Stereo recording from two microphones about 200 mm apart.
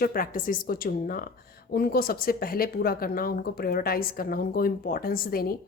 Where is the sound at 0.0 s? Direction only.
45° left (ahead or behind).